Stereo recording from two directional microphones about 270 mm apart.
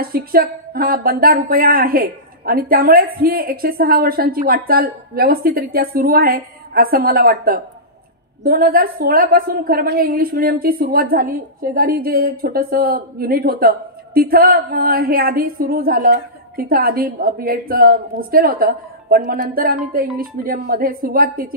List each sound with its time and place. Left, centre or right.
0.0 s speech: right